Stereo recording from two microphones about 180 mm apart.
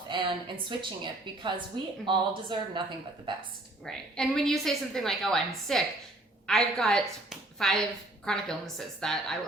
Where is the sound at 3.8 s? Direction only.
5° left (ahead or behind).